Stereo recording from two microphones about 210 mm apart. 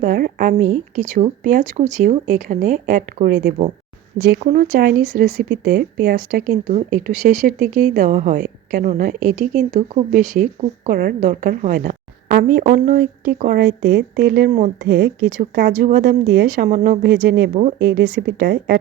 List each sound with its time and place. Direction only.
0.0 s a woman's voice: 45° right (ahead or behind)
14.9 s a woman's voice: 50° right (ahead or behind)